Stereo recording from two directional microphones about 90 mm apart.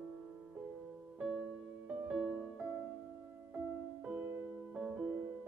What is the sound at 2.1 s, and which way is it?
Music, centre (ahead or behind).